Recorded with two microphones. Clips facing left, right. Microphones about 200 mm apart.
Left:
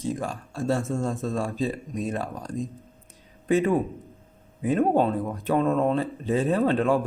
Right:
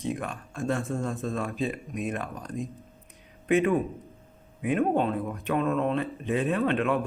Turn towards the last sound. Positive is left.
turn(degrees=30)  # may be behind; listen again after turning